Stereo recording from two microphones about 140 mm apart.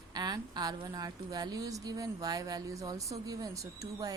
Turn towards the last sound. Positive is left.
turn(degrees=-25)  # may be behind; listen again after turning